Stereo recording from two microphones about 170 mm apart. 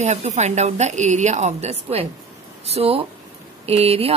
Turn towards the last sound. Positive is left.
turn(degrees=-35)  # may be behind; listen again after turning